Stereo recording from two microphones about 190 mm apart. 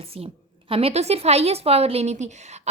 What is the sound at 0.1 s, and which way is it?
A woman's voice, 30° right (ahead or behind).